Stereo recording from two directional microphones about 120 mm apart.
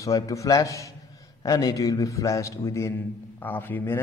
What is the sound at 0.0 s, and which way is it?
A man's voice, 25° left (ahead or behind).